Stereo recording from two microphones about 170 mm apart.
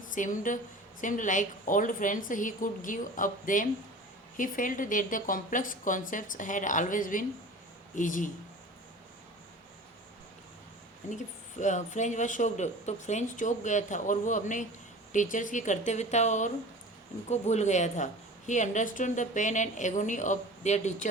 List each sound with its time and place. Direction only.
0.1 s a woman's voice: 50° left (ahead or behind)
11.6 s a woman's voice: 45° left (ahead or behind)